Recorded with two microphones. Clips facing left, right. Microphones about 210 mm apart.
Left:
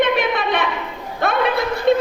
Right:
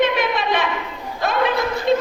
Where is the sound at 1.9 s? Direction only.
55° left (ahead or behind).